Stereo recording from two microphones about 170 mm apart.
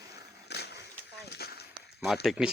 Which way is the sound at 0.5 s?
80° left.